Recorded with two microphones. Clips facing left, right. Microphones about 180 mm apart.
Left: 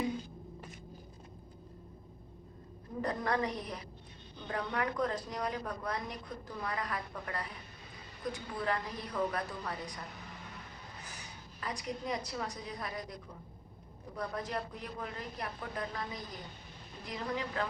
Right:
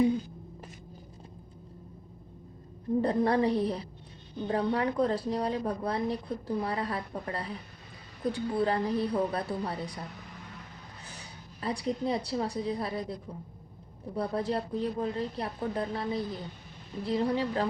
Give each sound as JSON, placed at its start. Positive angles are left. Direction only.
{"t": 3.0, "sound": "speech", "side_deg": -30}
{"t": 11.6, "sound": "speech", "side_deg": -30}
{"t": 14.2, "sound": "speech", "side_deg": -30}